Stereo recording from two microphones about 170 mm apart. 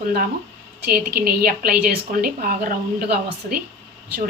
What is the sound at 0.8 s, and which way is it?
A woman's voice, 65° right (ahead or behind).